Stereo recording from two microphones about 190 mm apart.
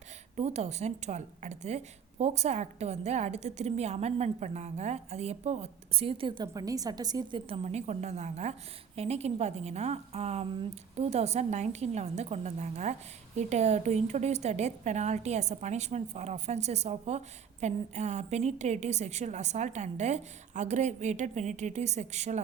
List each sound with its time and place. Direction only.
0.3 s a woman's voice: 35° right (ahead or behind)